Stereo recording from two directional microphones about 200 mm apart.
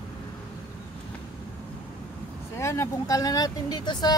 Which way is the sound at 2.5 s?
15° left (ahead or behind).